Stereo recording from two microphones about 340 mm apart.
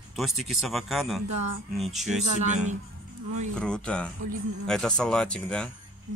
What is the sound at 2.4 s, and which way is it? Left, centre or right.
Speech, right.